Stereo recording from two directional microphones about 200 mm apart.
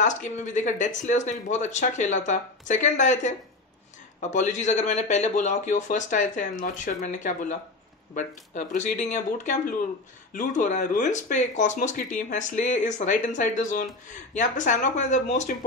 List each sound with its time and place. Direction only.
0.0 s speech: 40° left (ahead or behind)